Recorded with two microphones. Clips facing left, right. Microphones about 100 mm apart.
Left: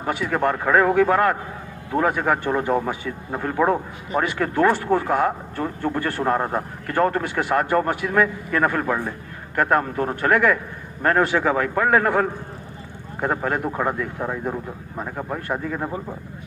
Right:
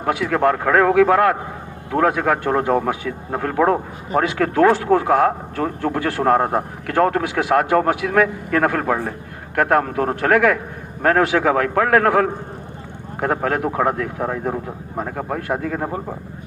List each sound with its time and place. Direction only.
0.0 s speech: 90° right
4.2 s speech: 90° right
13.1 s speech: 75° right (ahead or behind)